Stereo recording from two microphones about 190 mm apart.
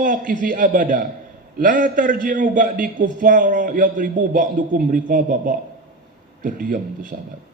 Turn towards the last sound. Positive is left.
turn(degrees=-45)  # may be behind; listen again after turning